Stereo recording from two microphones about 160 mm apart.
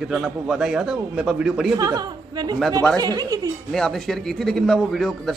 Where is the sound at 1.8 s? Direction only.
25° right (ahead or behind).